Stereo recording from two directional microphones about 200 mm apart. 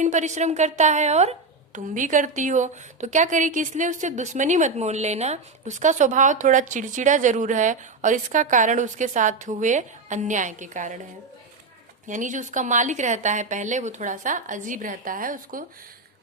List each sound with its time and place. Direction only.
0.0 s a woman's voice: 35° right (ahead or behind)
12.0 s a woman's voice: 40° right (ahead or behind)